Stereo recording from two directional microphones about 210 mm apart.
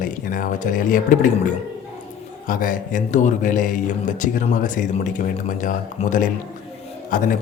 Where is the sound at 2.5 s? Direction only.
40° left (ahead or behind).